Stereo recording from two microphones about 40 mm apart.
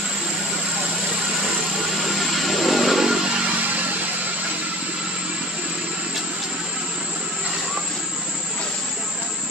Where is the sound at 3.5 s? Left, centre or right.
Right.